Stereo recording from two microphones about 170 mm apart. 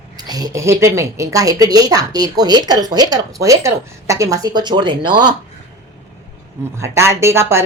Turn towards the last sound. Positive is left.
turn(degrees=-15)  # may be behind; listen again after turning